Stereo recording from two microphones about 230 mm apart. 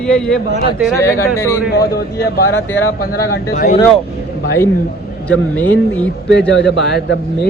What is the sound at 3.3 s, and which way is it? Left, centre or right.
Speech, left.